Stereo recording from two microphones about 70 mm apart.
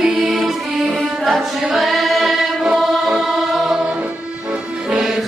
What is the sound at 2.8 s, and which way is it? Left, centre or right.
Music, centre.